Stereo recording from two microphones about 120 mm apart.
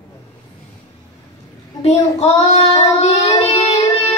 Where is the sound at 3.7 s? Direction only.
60° left (ahead or behind).